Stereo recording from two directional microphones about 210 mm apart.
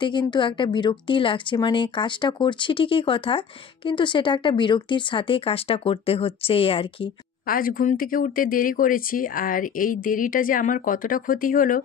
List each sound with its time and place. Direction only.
0.0 s a woman's voice: 20° left (ahead or behind)
7.4 s speech: 40° left (ahead or behind)